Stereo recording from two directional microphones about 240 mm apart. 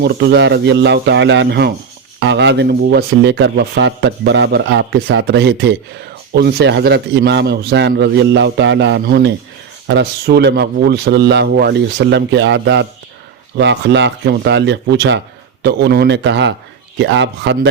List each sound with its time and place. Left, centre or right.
0.0 s speech: right